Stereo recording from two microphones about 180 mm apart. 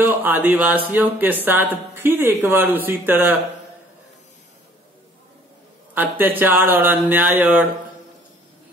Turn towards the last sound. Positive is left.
turn(degrees=-10)  # may be behind; listen again after turning